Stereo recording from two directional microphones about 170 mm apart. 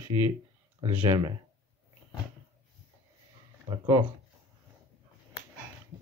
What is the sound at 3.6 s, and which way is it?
Speech, 25° right (ahead or behind).